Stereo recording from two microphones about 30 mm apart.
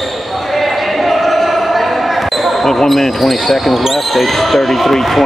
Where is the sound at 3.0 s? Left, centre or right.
Centre.